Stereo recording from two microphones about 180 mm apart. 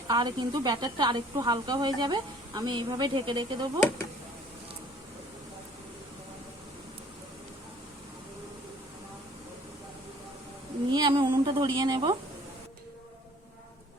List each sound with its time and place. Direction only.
0.1 s speech: 25° right (ahead or behind)
10.8 s a woman's voice: 25° right (ahead or behind)